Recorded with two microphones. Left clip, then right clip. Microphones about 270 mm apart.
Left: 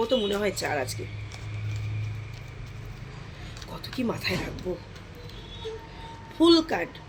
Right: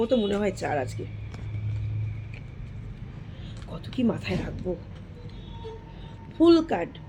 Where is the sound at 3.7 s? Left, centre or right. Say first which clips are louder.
Right 2 dB; centre.